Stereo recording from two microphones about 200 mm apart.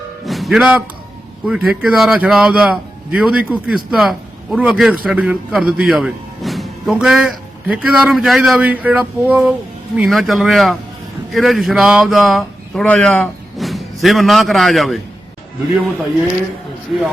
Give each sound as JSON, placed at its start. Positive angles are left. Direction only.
{"t": 0.3, "sound": "speech", "side_deg": 0}